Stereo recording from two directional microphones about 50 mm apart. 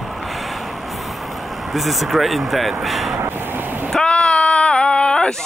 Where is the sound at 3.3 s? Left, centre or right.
Right.